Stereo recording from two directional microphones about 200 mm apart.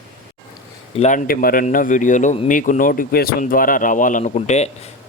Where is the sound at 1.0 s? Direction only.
40° left (ahead or behind).